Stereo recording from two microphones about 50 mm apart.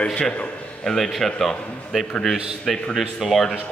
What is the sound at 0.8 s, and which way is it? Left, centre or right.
A man's voice, centre.